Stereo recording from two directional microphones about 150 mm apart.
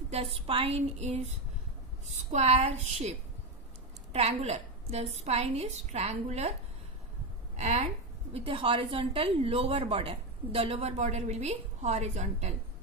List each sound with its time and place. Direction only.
0.1 s a woman's voice: 40° right (ahead or behind)
7.5 s a woman's voice: 50° right (ahead or behind)